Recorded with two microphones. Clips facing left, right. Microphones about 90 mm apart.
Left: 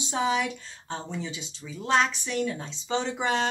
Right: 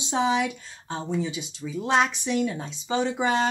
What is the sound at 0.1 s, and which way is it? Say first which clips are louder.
Speech: right 3 dB; 20° right (ahead or behind).